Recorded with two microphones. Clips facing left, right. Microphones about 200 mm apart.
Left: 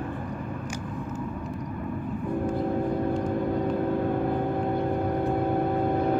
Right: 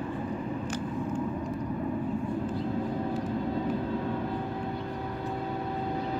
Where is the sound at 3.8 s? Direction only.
55° left (ahead or behind).